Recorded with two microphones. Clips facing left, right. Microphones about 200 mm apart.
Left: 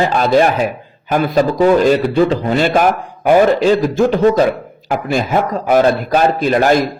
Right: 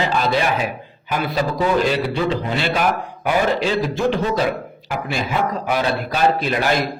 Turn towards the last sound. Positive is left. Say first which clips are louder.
# left 7 dB
turn(degrees=45)  # may be behind; listen again after turning